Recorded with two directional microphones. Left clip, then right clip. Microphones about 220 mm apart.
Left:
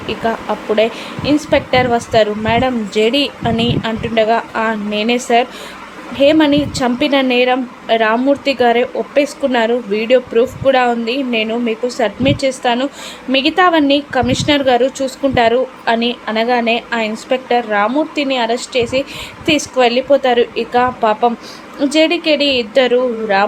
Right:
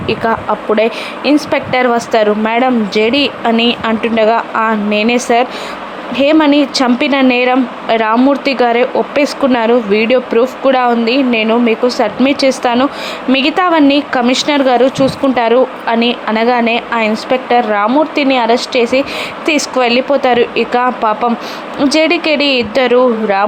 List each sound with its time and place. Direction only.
0.2 s speech: 15° right (ahead or behind)